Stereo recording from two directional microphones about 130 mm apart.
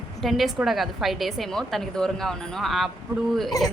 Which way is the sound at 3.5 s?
30° left (ahead or behind).